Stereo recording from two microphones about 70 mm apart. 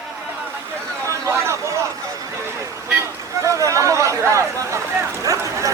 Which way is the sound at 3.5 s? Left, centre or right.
Right.